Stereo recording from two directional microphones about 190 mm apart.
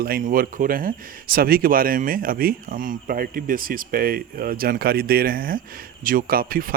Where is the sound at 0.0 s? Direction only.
45° right (ahead or behind).